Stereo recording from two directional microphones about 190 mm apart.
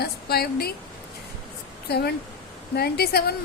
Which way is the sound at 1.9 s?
55° left (ahead or behind).